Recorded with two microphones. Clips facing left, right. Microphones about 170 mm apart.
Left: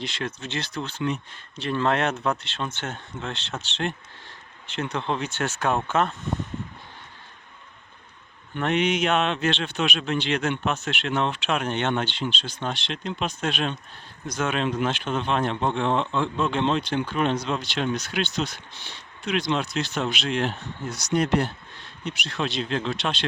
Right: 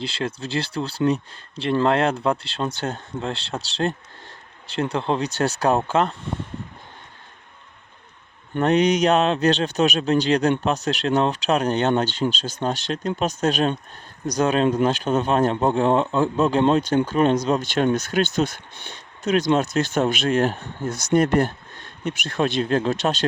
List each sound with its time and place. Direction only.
0.0 s speech: 30° right (ahead or behind)
8.5 s speech: 40° right (ahead or behind)